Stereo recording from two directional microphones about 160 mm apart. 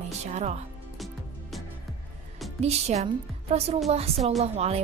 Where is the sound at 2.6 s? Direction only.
40° right (ahead or behind).